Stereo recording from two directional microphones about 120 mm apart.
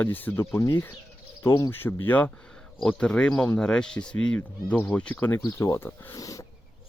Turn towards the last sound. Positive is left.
turn(degrees=30)  # may be behind; listen again after turning